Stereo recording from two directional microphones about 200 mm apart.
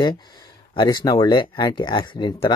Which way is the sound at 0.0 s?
20° left (ahead or behind).